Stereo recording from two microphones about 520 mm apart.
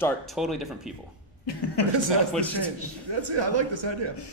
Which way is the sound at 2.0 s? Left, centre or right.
Right.